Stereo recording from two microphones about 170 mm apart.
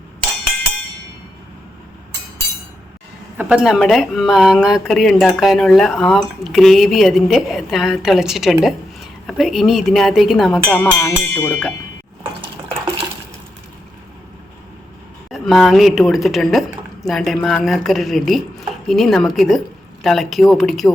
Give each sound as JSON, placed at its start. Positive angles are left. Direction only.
{"t": 3.3, "sound": "speech", "side_deg": -5}
{"t": 10.9, "sound": "speech", "side_deg": 15}
{"t": 15.3, "sound": "speech", "side_deg": 0}